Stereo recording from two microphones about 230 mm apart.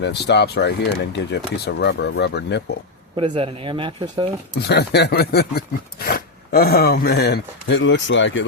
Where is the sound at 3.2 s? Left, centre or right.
Right.